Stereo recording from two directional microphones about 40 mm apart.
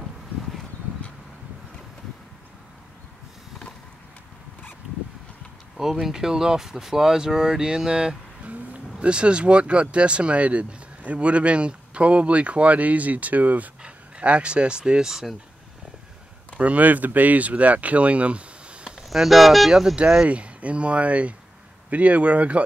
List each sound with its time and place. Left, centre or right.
5.8 s speech: centre; by 13.7 s right
13.8 s speech: right; by 15.3 s centre
16.5 s speech: right
19.0 s speech: centre
20.2 s speech: right